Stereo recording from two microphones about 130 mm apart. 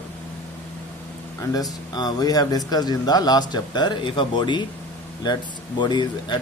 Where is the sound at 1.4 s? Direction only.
30° left (ahead or behind).